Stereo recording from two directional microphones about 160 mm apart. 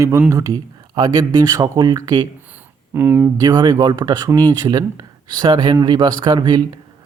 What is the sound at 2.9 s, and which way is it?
Speech, 15° right (ahead or behind).